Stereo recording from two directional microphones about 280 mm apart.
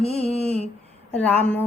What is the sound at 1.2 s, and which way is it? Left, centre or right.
Music, centre.